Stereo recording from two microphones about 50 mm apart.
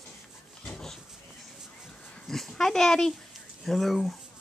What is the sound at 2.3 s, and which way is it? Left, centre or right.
Dog, centre.